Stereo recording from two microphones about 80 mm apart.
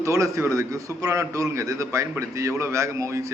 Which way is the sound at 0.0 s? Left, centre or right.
Right.